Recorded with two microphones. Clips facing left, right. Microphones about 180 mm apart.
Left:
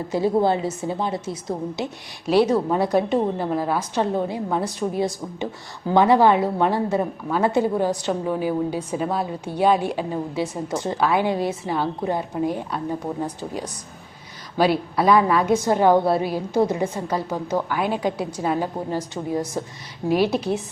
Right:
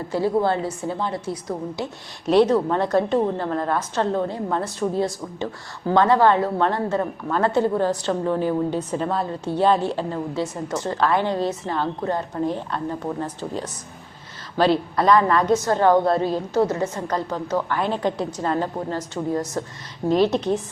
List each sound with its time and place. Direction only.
0.1 s a woman's voice: 15° left (ahead or behind)
2.2 s a woman's voice: 5° left (ahead or behind)